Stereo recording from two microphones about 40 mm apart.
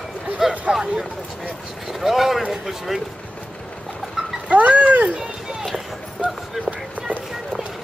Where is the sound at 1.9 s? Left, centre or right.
Centre.